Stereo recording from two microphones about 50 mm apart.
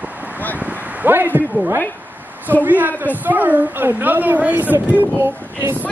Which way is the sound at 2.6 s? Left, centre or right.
Right.